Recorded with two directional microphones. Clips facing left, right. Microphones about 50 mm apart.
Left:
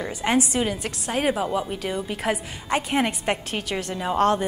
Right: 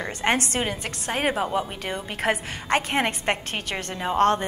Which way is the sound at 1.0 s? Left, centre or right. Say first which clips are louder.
Left 1 dB; right.